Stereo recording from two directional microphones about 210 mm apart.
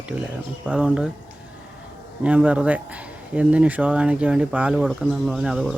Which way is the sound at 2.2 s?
5° right (ahead or behind).